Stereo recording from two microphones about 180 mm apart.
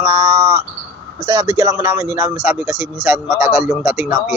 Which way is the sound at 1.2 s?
15° right (ahead or behind).